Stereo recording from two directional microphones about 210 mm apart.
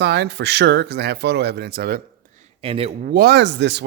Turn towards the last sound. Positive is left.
turn(degrees=-55)  # may be behind; listen again after turning